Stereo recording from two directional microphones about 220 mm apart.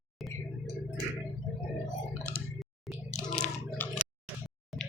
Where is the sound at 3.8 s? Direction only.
10° left (ahead or behind).